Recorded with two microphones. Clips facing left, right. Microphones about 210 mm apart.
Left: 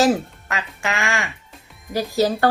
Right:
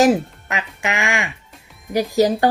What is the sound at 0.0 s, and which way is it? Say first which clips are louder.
Music: right 3 dB; 20° right (ahead or behind).